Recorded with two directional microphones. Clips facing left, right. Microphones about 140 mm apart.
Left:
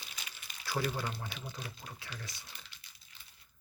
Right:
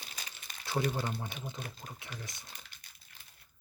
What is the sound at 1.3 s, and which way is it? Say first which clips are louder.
Speech: right 2 dB; 20° right (ahead or behind).